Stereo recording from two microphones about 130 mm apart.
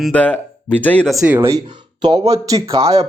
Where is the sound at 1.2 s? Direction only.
15° right (ahead or behind).